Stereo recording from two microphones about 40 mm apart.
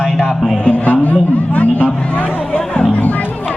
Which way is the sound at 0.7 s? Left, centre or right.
Left.